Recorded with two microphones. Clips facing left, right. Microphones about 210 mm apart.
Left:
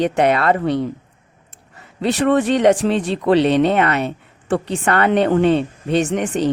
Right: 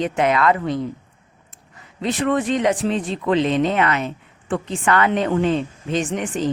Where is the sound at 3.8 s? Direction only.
40° left (ahead or behind).